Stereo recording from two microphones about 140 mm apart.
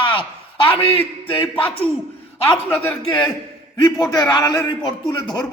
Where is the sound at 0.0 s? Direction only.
40° left (ahead or behind).